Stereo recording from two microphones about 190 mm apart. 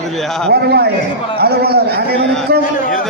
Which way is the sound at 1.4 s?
55° right (ahead or behind).